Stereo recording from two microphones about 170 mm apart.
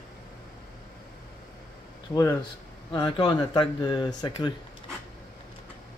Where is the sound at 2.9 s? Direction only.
25° left (ahead or behind).